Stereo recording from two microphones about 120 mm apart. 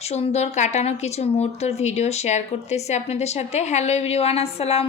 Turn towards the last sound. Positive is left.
turn(degrees=60)  # may be behind; listen again after turning